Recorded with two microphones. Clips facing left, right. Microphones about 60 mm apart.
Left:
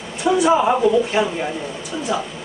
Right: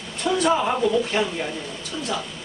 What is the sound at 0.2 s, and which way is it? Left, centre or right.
A woman's voice, centre.